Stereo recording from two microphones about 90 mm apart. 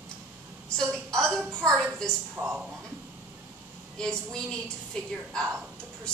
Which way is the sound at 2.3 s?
25° right (ahead or behind).